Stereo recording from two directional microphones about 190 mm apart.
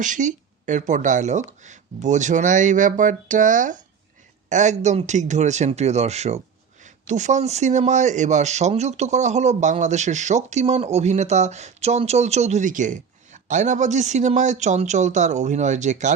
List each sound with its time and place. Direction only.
0.0 s speech: 40° right (ahead or behind)